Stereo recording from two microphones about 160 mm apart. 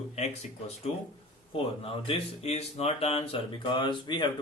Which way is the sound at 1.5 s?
35° left (ahead or behind).